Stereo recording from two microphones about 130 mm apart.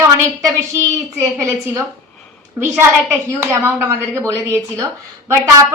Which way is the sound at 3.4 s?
15° right (ahead or behind).